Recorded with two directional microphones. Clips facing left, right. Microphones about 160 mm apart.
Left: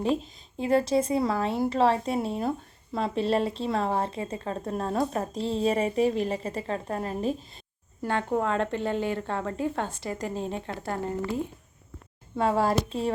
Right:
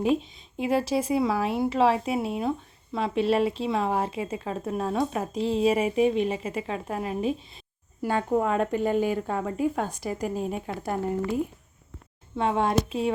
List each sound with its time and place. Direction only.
0.0 s speech: 30° left (ahead or behind)
0.5 s speech: 5° right (ahead or behind)
12.4 s speech: centre (ahead or behind)